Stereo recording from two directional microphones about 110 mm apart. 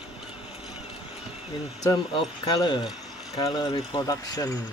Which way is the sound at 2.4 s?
40° left (ahead or behind).